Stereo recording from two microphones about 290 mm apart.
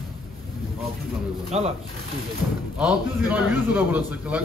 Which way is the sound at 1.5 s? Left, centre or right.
Right.